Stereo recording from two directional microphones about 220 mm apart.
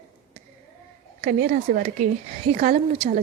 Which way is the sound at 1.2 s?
35° right (ahead or behind).